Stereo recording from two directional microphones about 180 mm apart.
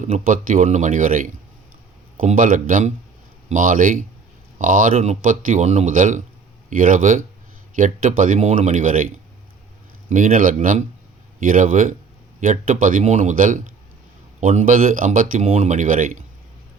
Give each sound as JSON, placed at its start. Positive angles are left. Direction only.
{"t": 0.3, "sound": "speech", "side_deg": -45}
{"t": 10.1, "sound": "speech", "side_deg": -45}